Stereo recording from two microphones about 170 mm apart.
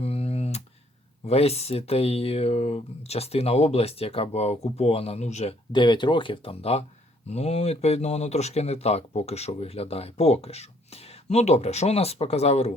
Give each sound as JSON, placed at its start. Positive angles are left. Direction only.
{"t": 0.0, "sound": "typing", "side_deg": 35}
{"t": 1.3, "sound": "speech", "side_deg": 35}
{"t": 5.7, "sound": "speech", "side_deg": 25}